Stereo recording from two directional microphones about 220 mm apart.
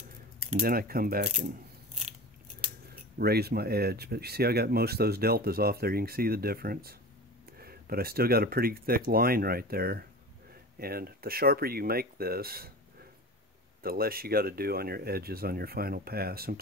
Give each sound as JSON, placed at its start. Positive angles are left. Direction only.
{"t": 0.5, "sound": "speech", "side_deg": -40}
{"t": 2.9, "sound": "speech", "side_deg": -45}
{"t": 13.8, "sound": "speech", "side_deg": -45}